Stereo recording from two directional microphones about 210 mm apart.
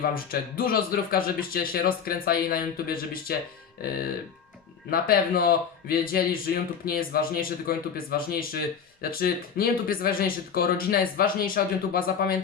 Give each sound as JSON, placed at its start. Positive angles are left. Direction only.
{"t": 0.0, "sound": "speech", "side_deg": 45}
{"t": 4.9, "sound": "speech", "side_deg": 45}